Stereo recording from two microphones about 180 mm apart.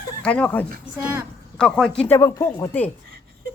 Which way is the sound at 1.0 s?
15° right (ahead or behind).